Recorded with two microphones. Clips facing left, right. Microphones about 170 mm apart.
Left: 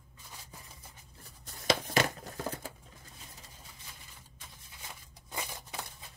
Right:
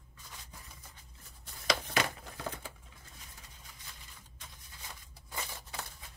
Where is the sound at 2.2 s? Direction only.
40° left (ahead or behind).